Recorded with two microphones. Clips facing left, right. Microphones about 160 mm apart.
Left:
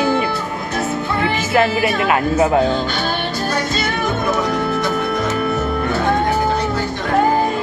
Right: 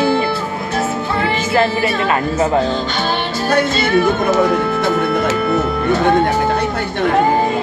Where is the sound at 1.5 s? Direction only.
5° left (ahead or behind).